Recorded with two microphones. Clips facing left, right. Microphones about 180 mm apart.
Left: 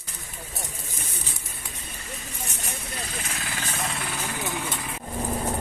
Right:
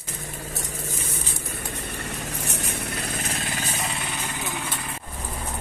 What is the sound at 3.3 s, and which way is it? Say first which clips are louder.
Vehicle: right 3 dB; 25° right (ahead or behind).